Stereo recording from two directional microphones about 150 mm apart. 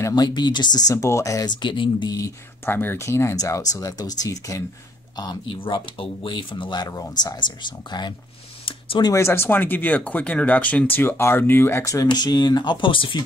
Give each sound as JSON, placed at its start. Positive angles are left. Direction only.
{"t": 0.0, "sound": "speech", "side_deg": 25}
{"t": 8.6, "sound": "a sound", "side_deg": 35}
{"t": 9.1, "sound": "speech", "side_deg": 15}